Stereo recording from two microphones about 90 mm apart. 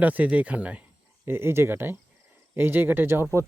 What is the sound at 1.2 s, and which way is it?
Speech, 25° right (ahead or behind).